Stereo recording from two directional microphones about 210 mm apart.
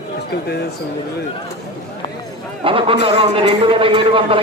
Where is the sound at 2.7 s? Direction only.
25° right (ahead or behind).